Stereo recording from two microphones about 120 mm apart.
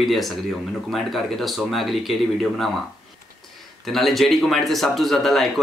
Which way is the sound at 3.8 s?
Centre (ahead or behind).